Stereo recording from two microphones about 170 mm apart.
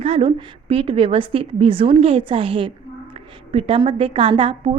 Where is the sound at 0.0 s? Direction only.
35° right (ahead or behind).